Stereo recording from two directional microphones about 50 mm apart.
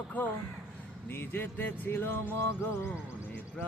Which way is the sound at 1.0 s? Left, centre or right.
Left.